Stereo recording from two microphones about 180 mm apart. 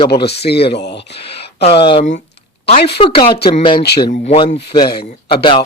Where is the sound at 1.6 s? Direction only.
30° left (ahead or behind).